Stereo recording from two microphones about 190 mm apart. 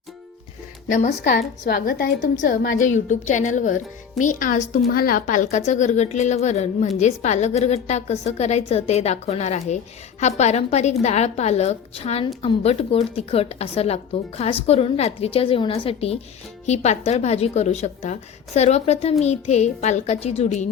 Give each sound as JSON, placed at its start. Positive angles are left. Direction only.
{"t": 0.9, "sound": "a woman's voice", "side_deg": 40}